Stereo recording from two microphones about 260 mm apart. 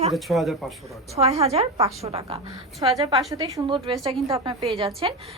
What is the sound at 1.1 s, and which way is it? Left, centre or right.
A woman's voice, right.